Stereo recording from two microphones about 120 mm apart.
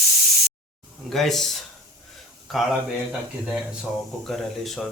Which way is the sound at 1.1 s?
Centre (ahead or behind).